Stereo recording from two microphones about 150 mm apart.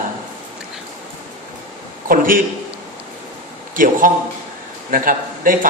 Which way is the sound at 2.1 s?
65° right (ahead or behind).